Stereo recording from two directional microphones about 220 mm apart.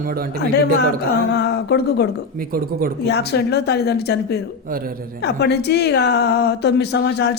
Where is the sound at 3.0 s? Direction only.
50° left (ahead or behind).